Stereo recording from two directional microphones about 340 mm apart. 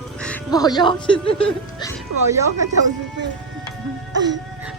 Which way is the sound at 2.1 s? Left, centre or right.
Right.